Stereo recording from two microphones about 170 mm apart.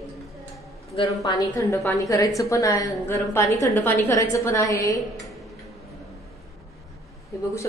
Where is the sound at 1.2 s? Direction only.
20° left (ahead or behind).